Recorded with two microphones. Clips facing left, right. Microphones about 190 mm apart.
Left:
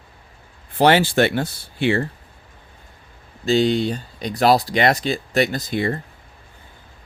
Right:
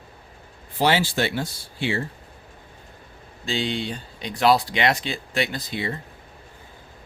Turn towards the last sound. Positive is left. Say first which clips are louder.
# left 7 dB
turn(degrees=50)  # may be behind; listen again after turning